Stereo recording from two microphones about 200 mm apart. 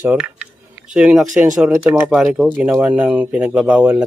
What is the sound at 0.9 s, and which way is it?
Speech, 5° right (ahead or behind).